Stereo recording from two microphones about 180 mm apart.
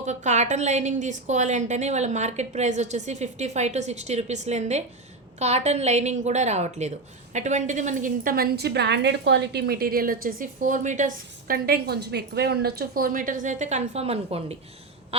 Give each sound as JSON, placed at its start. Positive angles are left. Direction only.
{"t": 0.0, "sound": "a woman's voice", "side_deg": -40}